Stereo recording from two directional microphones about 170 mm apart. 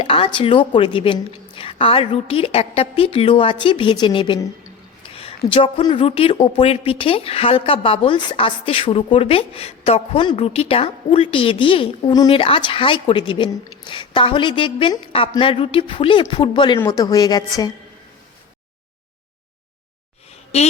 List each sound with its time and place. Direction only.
0.0 s a woman's voice: 30° left (ahead or behind)
20.5 s a woman's voice: 40° left (ahead or behind)